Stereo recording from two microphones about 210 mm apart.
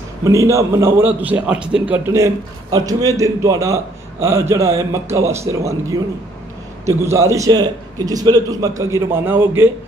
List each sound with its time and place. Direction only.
0.2 s a man's voice: 15° right (ahead or behind)